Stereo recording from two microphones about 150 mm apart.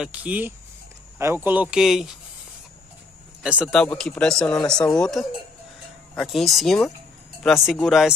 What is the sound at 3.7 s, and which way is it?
Speech, 5° left (ahead or behind).